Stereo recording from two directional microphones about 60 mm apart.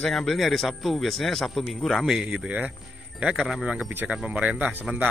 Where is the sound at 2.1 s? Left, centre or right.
Centre.